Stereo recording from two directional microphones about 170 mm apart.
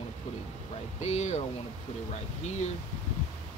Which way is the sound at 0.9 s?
40° left (ahead or behind).